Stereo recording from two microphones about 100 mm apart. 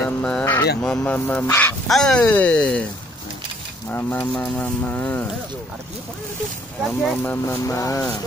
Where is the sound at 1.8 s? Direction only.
5° left (ahead or behind).